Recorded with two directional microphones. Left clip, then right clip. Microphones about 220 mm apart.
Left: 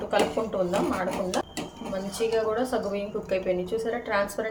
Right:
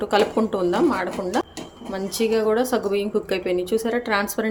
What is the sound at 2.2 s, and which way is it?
A woman's voice, 50° right (ahead or behind).